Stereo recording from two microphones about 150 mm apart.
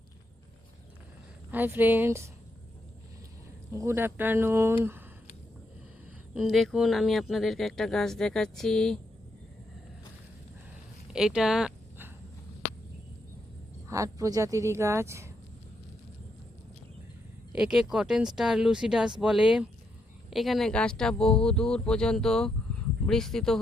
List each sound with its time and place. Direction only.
1.5 s speech: 10° right (ahead or behind)
3.7 s speech: 20° right (ahead or behind)
6.3 s speech: 5° right (ahead or behind)
11.1 s speech: 5° right (ahead or behind)
13.9 s speech: 20° right (ahead or behind)
17.6 s speech: 5° right (ahead or behind)